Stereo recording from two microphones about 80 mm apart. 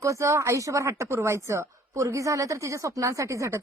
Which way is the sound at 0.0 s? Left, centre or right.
Right.